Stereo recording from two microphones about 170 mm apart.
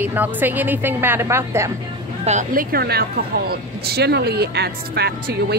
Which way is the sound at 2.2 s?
45° right (ahead or behind).